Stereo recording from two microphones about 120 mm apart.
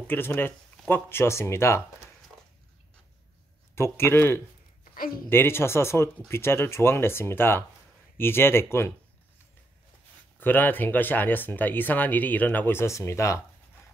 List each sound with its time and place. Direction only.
0.0 s speech: 20° left (ahead or behind)
3.7 s speech: 20° left (ahead or behind)
10.4 s speech: 15° left (ahead or behind)